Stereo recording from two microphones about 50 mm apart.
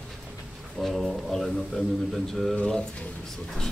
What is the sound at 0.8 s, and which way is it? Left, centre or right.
Speech, centre.